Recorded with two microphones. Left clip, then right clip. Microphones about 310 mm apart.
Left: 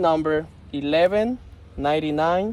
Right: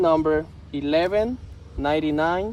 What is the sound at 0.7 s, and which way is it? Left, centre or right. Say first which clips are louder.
Speech: left 2 dB; left.